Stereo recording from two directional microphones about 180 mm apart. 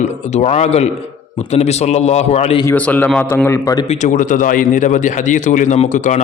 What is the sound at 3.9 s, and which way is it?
Speech, 45° left (ahead or behind).